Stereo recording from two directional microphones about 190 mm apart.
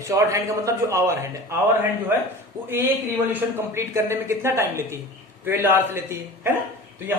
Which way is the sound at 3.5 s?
15° right (ahead or behind).